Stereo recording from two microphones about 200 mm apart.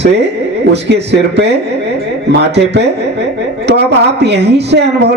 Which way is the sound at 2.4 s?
55° right (ahead or behind).